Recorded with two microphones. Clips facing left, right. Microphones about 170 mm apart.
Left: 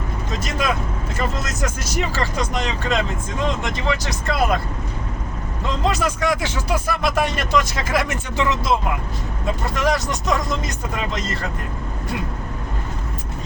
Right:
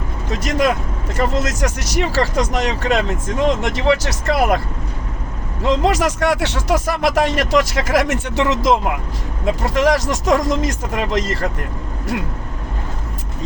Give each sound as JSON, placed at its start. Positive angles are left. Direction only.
{"t": 0.3, "sound": "vehicle", "side_deg": -75}
{"t": 1.1, "sound": "speech", "side_deg": -75}
{"t": 5.6, "sound": "speech", "side_deg": -85}
{"t": 9.7, "sound": "speech", "side_deg": -90}